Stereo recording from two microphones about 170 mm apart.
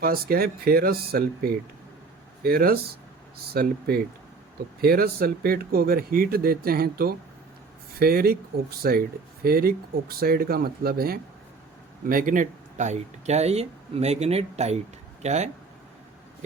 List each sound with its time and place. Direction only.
0.0 s speech: 60° right (ahead or behind); by 15.4 s 40° right (ahead or behind)